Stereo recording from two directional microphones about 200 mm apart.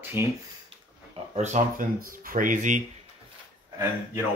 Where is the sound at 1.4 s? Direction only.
40° right (ahead or behind).